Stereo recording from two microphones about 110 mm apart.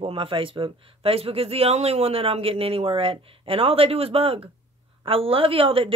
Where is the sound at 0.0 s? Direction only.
55° right (ahead or behind).